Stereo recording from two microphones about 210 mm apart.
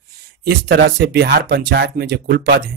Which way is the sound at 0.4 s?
55° right (ahead or behind).